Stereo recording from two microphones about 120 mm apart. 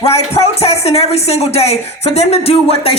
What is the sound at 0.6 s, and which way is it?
Speech, 60° left (ahead or behind).